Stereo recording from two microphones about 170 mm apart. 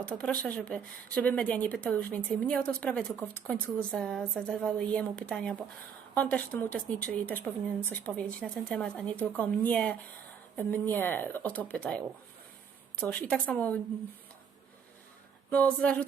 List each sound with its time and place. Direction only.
0.2 s a woman's voice: 5° left (ahead or behind)
15.4 s a woman's voice: 10° left (ahead or behind)